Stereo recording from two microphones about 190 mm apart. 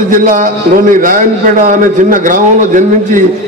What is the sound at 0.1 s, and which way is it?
A man's voice, 45° right (ahead or behind).